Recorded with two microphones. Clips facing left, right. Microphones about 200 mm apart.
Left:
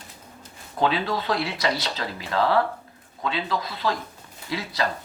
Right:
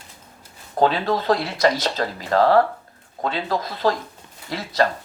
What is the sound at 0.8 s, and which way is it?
Speech, 45° right (ahead or behind).